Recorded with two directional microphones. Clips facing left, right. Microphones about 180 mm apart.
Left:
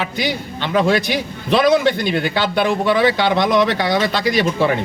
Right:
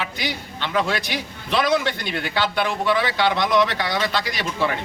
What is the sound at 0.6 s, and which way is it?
Speech, 30° left (ahead or behind).